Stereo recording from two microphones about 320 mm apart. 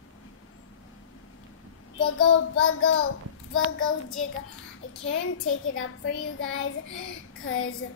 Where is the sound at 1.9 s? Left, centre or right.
Left.